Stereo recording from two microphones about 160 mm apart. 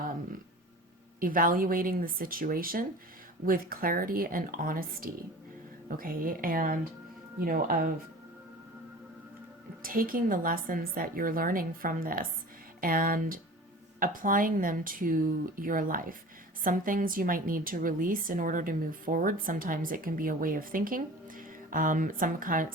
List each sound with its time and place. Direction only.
1.2 s a woman's voice: 60° right (ahead or behind)
9.8 s a woman's voice: 60° right (ahead or behind)